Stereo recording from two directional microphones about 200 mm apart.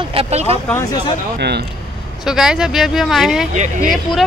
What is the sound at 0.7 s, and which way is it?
Speech, 15° left (ahead or behind).